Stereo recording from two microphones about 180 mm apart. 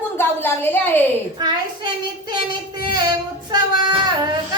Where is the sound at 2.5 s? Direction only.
25° right (ahead or behind).